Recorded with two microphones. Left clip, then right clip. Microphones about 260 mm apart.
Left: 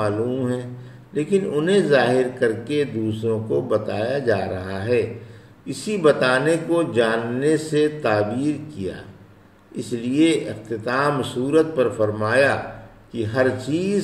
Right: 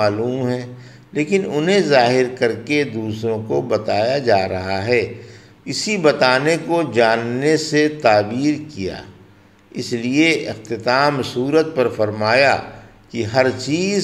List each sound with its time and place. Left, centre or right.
0.4 s speech: right